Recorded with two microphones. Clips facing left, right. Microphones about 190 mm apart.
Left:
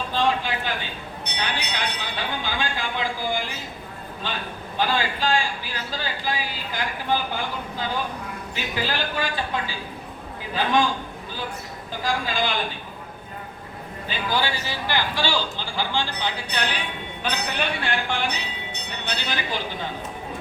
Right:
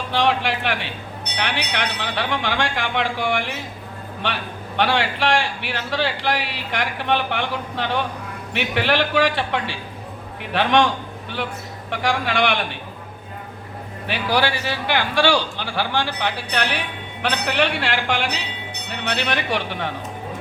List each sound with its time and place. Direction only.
0.1 s a man's voice: 75° right (ahead or behind)
14.1 s a man's voice: 75° right (ahead or behind)